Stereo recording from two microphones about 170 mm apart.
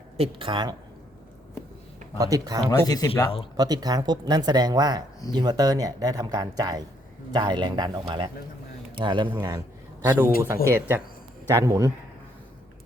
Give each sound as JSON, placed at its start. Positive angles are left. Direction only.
{"t": 0.2, "sound": "speech", "side_deg": -30}
{"t": 2.1, "sound": "speech", "side_deg": -20}
{"t": 2.6, "sound": "speech", "side_deg": 20}
{"t": 3.6, "sound": "speech", "side_deg": -25}
{"t": 10.0, "sound": "speech", "side_deg": -10}